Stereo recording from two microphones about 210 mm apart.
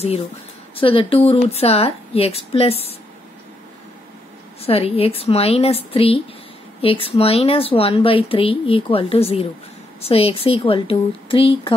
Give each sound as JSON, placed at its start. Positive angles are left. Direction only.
{"t": 0.7, "sound": "speech", "side_deg": 25}
{"t": 4.6, "sound": "speech", "side_deg": 30}